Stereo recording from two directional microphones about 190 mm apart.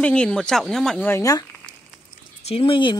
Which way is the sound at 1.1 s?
15° left (ahead or behind).